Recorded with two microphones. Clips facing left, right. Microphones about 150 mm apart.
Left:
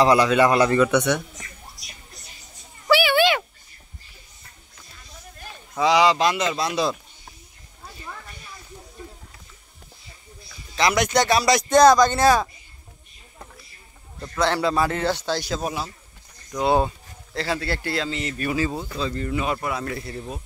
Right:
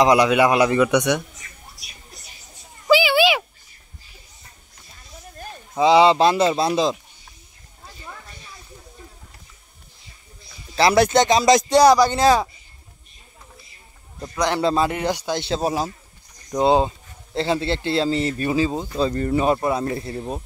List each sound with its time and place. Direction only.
0.0 s a man's voice: 15° right (ahead or behind)
2.9 s a sound: 15° right (ahead or behind)
5.8 s a man's voice: 30° right (ahead or behind)
10.8 s a man's voice: 30° right (ahead or behind); by 12.4 s 15° right (ahead or behind)
14.2 s a man's voice: 15° right (ahead or behind)
14.6 s a man's voice: 30° right (ahead or behind)
14.9 s a man's voice: 15° right (ahead or behind)
15.4 s speech: 30° right (ahead or behind)
16.5 s a man's voice: 25° right (ahead or behind)
18.9 s speech: 40° right (ahead or behind)